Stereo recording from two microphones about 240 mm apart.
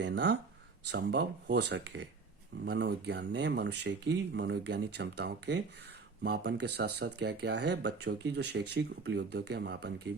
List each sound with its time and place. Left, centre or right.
0.0 s speech: right
8.4 s speech: right
8.7 s speech: right